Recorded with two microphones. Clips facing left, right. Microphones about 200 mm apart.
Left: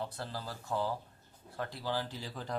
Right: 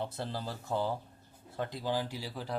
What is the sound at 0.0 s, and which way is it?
Speech, 25° right (ahead or behind).